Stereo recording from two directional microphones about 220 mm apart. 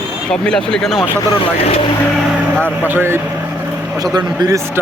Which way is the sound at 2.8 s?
10° right (ahead or behind).